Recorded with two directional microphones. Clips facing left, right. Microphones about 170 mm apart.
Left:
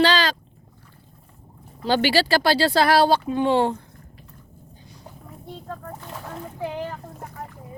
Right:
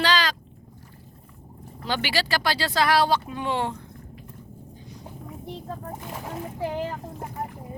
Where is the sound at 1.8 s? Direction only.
35° left (ahead or behind).